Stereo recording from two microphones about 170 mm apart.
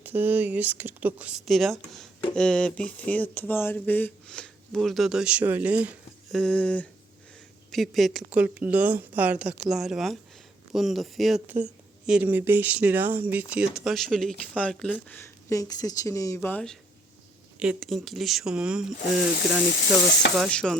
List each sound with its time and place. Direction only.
0.0 s speech: 10° right (ahead or behind)
6.4 s speech: 5° left (ahead or behind)
17.6 s speech: 5° right (ahead or behind)